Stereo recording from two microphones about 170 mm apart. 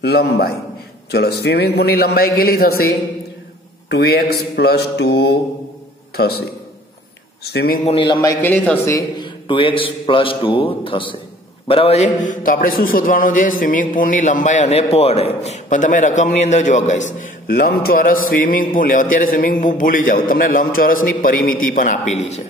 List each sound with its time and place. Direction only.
0.0 s a man's voice: 70° left (ahead or behind)
7.4 s a man's voice: 65° left (ahead or behind)
7.8 s a man's voice: 30° left (ahead or behind)
8.2 s speech: 15° left (ahead or behind)
9.2 s a man's voice: 30° left (ahead or behind)
17.5 s a man's voice: 60° left (ahead or behind); by 22.4 s 40° left (ahead or behind)